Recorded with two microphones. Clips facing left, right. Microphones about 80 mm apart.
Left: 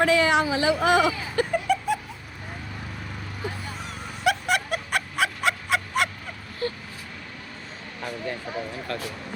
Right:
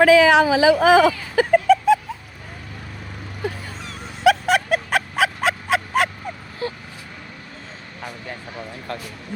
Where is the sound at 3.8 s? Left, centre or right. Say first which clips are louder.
Right 1 dB; right.